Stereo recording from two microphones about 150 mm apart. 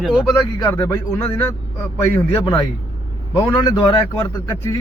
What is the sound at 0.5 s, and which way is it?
Speech, 20° left (ahead or behind).